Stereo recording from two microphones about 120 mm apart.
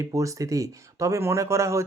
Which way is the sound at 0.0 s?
25° right (ahead or behind).